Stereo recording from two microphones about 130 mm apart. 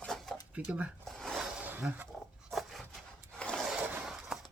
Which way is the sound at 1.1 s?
Centre (ahead or behind).